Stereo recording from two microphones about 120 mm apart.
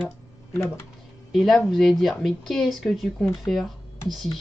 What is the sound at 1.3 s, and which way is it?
Speech, centre (ahead or behind).